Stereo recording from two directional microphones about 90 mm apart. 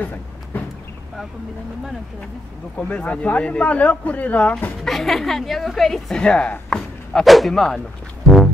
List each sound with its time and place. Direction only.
0.0 s vehicle: 20° left (ahead or behind)
2.9 s speech: 15° left (ahead or behind)
4.8 s a woman's voice: centre (ahead or behind)